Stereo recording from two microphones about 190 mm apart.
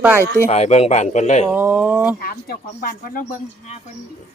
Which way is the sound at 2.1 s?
50° left (ahead or behind).